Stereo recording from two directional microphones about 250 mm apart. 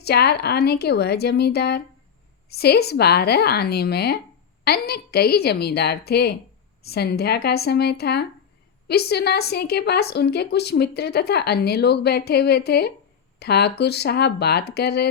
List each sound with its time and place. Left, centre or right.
0.0 s speech: left